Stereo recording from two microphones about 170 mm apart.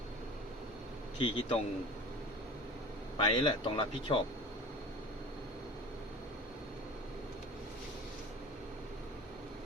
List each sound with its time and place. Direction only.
1.2 s speech: 30° left (ahead or behind)
3.2 s speech: 30° left (ahead or behind)